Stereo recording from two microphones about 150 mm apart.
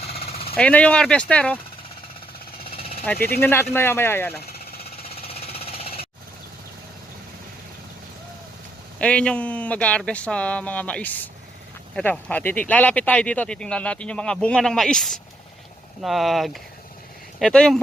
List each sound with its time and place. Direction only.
0.1 s jackhammer: 40° left (ahead or behind)
0.5 s speech: 10° left (ahead or behind)
3.0 s speech: 10° left (ahead or behind)
4.4 s engine: 90° left
4.8 s jackhammer: 40° left (ahead or behind)
9.0 s speech: 10° left (ahead or behind)